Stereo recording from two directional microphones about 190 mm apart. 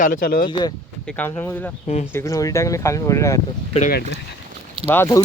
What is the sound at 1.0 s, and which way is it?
Speech, 5° left (ahead or behind).